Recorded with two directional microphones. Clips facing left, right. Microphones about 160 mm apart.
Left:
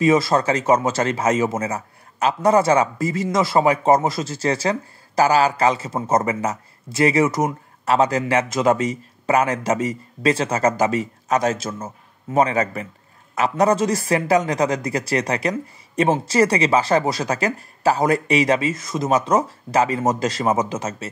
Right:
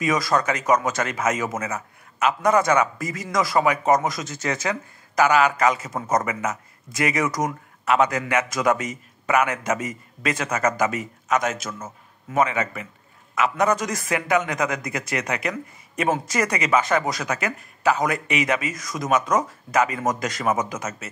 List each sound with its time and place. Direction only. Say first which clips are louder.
0.0 s a man's voice: left 5 dB; 30° left (ahead or behind)